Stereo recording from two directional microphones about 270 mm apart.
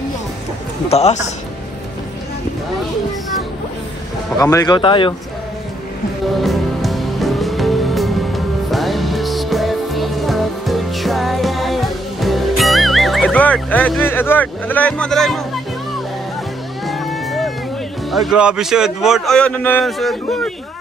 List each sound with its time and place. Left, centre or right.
0.8 s a man's voice: left
4.4 s speech: centre
6.4 s music: centre
16.8 s music: centre
18.1 s a man's voice: centre